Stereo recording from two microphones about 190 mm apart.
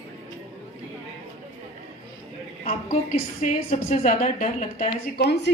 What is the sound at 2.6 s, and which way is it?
A woman's voice, 35° left (ahead or behind).